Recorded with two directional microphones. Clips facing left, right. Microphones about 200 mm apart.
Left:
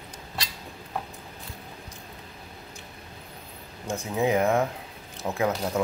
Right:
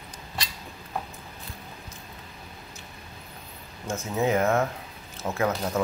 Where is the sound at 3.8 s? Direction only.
15° left (ahead or behind).